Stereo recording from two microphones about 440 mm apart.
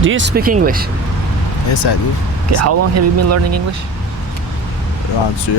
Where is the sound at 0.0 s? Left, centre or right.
Right.